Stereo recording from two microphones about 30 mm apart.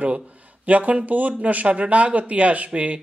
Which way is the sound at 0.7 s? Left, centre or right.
Right.